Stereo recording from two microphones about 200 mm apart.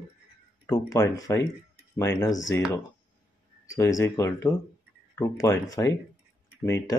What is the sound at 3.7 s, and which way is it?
Speech, 15° left (ahead or behind).